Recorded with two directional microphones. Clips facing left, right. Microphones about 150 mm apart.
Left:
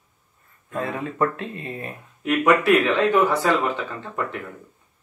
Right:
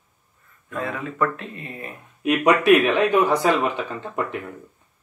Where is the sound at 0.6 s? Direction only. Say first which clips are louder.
Left 1 dB; 30° left (ahead or behind).